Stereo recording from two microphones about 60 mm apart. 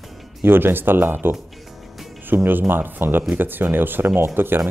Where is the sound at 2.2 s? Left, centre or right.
Right.